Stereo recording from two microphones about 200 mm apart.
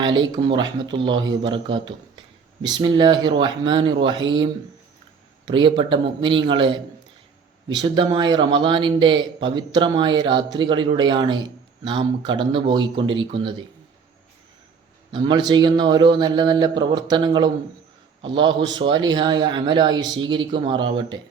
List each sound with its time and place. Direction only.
0.0 s a man's voice: 25° right (ahead or behind)
5.5 s a man's voice: 25° right (ahead or behind)
15.1 s a man's voice: 20° right (ahead or behind)